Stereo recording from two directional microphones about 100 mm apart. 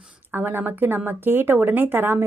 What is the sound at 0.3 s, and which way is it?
Speech, 20° right (ahead or behind).